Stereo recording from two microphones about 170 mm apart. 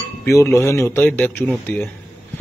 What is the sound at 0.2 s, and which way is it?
Speech, 15° left (ahead or behind).